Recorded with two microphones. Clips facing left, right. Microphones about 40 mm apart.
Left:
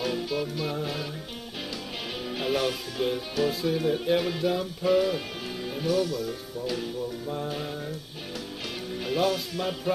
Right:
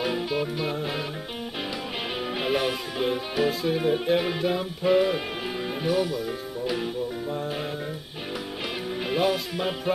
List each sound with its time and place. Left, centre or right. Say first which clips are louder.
0.0 s music: right 2 dB; right
2.3 s speech: right 1 dB; centre
7.2 s music: right 2 dB; centre
9.0 s speech: right 1 dB; centre